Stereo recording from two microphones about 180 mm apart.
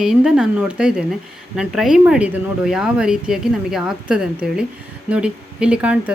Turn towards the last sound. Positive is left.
turn(degrees=-10)  # may be behind; listen again after turning